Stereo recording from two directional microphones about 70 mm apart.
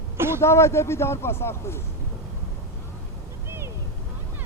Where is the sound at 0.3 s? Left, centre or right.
Left.